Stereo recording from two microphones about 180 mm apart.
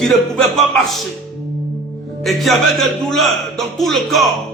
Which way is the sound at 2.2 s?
Centre (ahead or behind).